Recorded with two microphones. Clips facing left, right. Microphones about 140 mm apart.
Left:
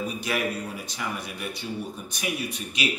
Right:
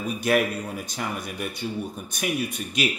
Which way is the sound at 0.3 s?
55° right (ahead or behind).